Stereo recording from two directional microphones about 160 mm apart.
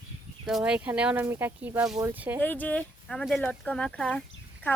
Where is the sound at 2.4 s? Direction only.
10° left (ahead or behind).